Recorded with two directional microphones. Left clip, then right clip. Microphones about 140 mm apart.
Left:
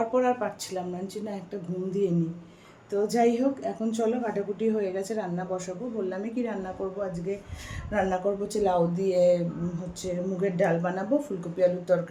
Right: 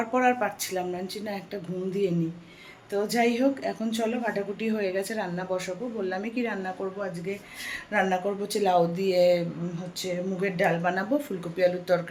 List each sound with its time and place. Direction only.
0.0 s a woman's voice: 5° left (ahead or behind)
2.9 s a woman's voice: 15° left (ahead or behind)
7.9 s a woman's voice: 15° left (ahead or behind)
8.6 s speech: 5° left (ahead or behind)
10.4 s a woman's voice: 15° left (ahead or behind)